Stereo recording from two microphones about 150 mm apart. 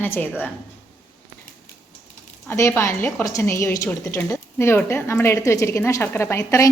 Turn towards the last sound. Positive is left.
turn(degrees=15)  # may be behind; listen again after turning